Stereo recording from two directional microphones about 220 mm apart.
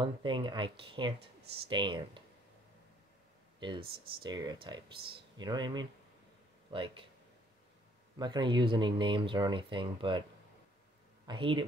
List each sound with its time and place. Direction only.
0.0 s speech: 20° right (ahead or behind)
3.5 s speech: 20° right (ahead or behind)
8.2 s speech: 20° right (ahead or behind)
11.2 s speech: 20° right (ahead or behind)